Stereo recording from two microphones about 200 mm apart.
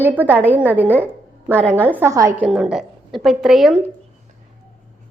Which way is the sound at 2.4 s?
5° right (ahead or behind).